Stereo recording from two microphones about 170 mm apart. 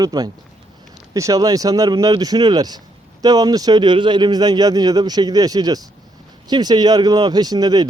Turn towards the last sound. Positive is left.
turn(degrees=-25)  # may be behind; listen again after turning